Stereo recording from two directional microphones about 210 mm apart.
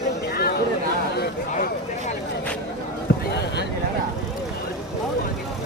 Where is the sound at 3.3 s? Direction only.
50° left (ahead or behind).